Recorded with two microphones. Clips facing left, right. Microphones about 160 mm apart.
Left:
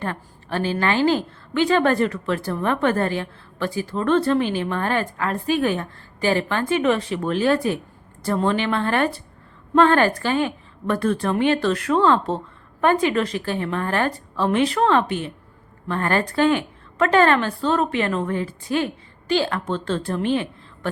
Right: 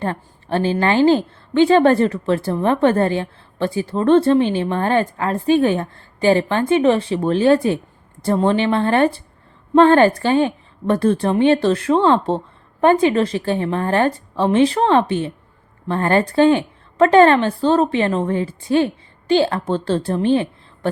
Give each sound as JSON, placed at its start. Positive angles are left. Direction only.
{"t": 0.0, "sound": "a woman's voice", "side_deg": -30}